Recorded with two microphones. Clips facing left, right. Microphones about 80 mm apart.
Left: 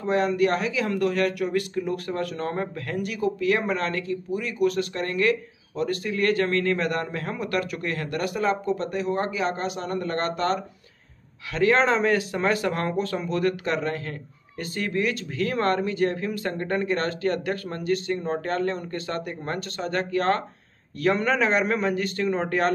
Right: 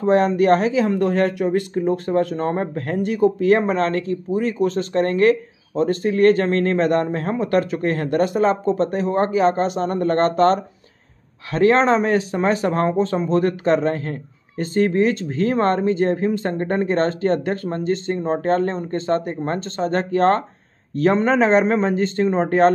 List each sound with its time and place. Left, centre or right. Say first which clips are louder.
0.0 s speech: right 6 dB; right